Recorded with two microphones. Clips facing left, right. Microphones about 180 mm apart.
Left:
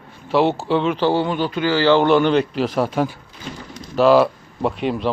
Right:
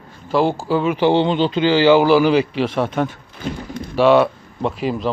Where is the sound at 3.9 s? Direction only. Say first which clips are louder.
Even; centre (ahead or behind).